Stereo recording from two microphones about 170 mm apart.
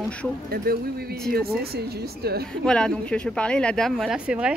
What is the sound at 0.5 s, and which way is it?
Speech, 60° right (ahead or behind).